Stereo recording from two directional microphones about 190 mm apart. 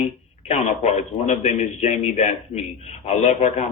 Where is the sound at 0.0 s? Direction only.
35° left (ahead or behind).